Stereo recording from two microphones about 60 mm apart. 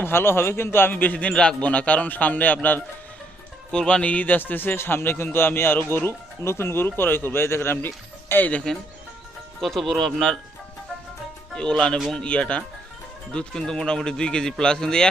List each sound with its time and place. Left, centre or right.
0.0 s a man's voice: left
3.7 s speech: centre; by 8.4 s left
9.6 s speech: centre
11.5 s a man's voice: centre